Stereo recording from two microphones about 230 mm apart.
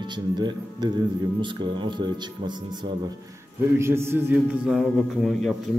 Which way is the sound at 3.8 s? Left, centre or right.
Centre.